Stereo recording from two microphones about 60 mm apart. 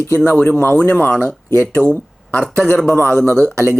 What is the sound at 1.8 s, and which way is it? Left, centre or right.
Speech, right.